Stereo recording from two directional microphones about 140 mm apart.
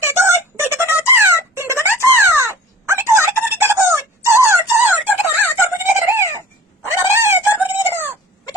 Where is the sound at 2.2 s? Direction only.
20° right (ahead or behind).